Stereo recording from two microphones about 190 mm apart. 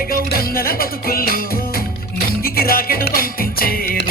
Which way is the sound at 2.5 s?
50° left (ahead or behind).